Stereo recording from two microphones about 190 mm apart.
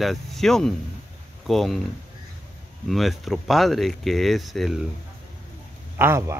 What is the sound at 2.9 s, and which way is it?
Speech, centre (ahead or behind).